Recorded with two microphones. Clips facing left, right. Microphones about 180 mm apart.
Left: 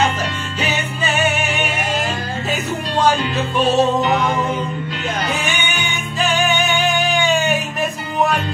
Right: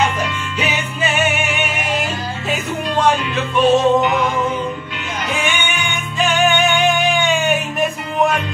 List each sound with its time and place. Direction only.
0.7 s music: 35° left (ahead or behind)
3.5 s music: 35° left (ahead or behind)
5.3 s music: 35° left (ahead or behind)
7.1 s music: centre (ahead or behind)